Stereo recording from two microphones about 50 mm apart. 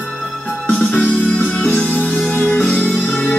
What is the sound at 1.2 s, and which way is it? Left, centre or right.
Music, left.